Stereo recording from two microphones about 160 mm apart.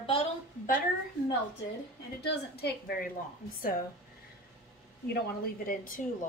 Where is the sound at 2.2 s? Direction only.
85° left.